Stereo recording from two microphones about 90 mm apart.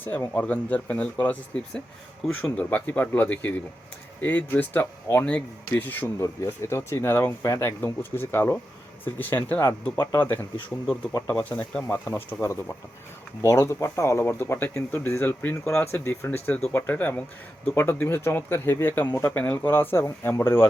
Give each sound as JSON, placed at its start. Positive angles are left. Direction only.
{"t": 0.0, "sound": "speech", "side_deg": 20}
{"t": 6.1, "sound": "speech", "side_deg": 35}
{"t": 11.1, "sound": "speech", "side_deg": 35}
{"t": 11.4, "sound": "speech", "side_deg": 15}
{"t": 11.8, "sound": "speech", "side_deg": 25}